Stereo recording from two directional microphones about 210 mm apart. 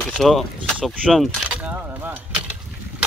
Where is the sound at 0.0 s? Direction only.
5° left (ahead or behind).